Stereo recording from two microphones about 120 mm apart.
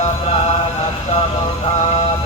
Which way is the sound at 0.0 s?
60° left (ahead or behind).